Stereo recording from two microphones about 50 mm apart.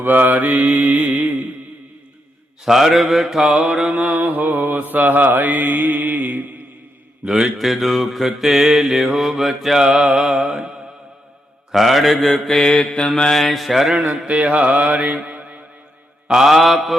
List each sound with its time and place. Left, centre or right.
0.0 s mantra: right
2.6 s mantra: centre
4.2 s mantra: right
7.3 s a man's voice: centre
7.6 s mantra: centre
11.7 s mantra: centre
13.3 s mantra: centre
14.6 s mantra: right
16.3 s mantra: centre